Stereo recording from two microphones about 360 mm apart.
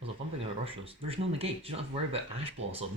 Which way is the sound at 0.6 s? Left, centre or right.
Centre.